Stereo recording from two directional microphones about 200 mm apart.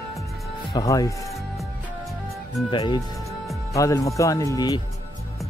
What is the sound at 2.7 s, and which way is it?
Speech, 20° left (ahead or behind).